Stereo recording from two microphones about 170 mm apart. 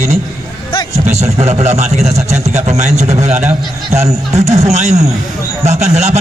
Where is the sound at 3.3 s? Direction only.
10° right (ahead or behind).